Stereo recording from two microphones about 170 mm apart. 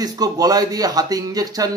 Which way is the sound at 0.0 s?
20° right (ahead or behind).